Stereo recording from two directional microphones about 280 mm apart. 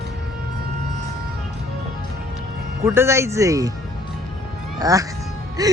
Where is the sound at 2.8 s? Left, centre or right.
Centre.